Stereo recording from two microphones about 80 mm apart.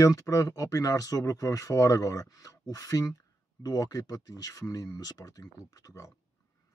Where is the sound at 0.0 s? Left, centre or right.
Left.